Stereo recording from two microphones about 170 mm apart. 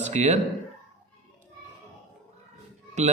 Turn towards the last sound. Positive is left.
turn(degrees=-45)  # may be behind; listen again after turning